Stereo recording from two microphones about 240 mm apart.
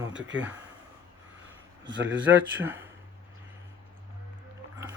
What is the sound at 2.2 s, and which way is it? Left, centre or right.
Speech, centre.